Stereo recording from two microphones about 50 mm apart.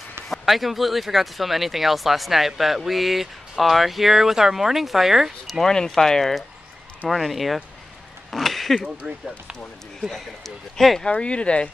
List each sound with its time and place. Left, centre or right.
0.3 s speech: centre
5.6 s speech: centre
8.3 s a sound: centre
9.0 s speech: right
10.0 s speech: centre
11.1 s speech: left